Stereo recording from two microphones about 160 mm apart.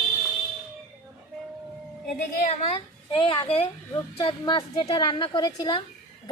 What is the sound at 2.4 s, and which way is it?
A child's voice, 40° left (ahead or behind).